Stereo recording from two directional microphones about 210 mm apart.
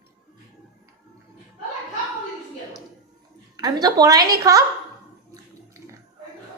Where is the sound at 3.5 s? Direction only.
20° right (ahead or behind).